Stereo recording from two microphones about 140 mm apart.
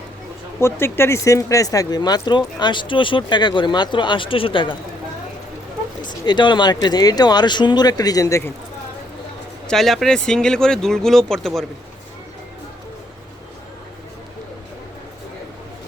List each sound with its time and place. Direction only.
0.6 s speech: 15° left (ahead or behind); by 4.8 s 35° left (ahead or behind)
6.0 s speech: 30° left (ahead or behind)
9.6 s speech: centre (ahead or behind)